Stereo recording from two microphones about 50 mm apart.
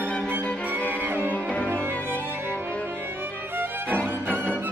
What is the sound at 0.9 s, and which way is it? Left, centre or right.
Music, right.